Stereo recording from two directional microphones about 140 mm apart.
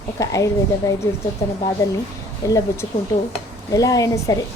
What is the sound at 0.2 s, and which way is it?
A woman's voice, 25° left (ahead or behind).